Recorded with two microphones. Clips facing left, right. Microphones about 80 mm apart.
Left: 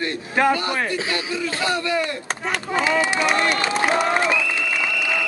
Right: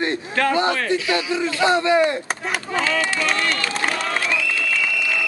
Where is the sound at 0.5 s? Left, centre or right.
Right.